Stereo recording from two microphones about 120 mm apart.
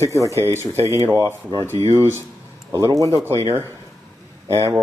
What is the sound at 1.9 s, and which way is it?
Speech, 20° right (ahead or behind).